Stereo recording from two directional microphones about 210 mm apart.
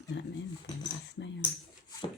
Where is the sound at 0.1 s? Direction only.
55° left (ahead or behind).